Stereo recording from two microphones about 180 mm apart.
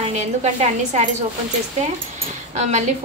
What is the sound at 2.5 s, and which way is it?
Speech, 40° right (ahead or behind).